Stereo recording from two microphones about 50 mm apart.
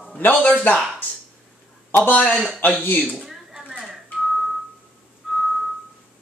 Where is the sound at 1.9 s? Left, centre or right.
Left.